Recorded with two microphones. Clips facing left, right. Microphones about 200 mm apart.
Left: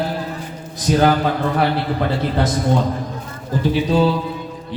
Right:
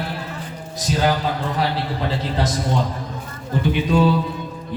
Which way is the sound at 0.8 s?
55° left (ahead or behind).